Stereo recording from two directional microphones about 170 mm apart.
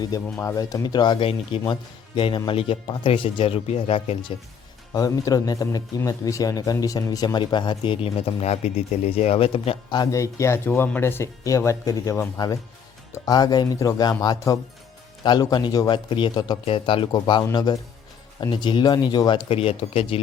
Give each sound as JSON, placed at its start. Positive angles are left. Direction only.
{"t": 0.3, "sound": "speech", "side_deg": 15}
{"t": 4.9, "sound": "speech", "side_deg": 20}
{"t": 9.9, "sound": "speech", "side_deg": 20}